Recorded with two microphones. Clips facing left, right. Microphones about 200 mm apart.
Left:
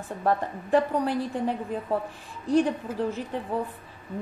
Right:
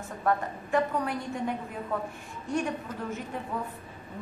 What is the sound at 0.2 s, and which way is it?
A woman's voice, 35° left (ahead or behind).